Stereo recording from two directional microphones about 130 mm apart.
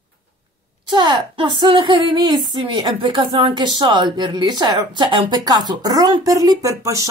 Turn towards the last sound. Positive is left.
turn(degrees=-25)  # may be behind; listen again after turning